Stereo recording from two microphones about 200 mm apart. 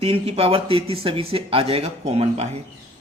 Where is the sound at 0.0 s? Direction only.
30° right (ahead or behind).